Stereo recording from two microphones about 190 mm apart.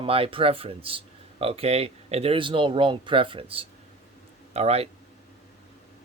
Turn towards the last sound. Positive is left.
turn(degrees=-30)  # may be behind; listen again after turning